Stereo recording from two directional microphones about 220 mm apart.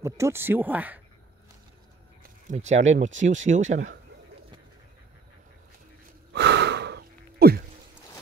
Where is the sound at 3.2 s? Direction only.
35° right (ahead or behind).